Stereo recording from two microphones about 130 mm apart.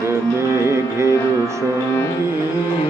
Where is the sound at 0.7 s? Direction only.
20° right (ahead or behind).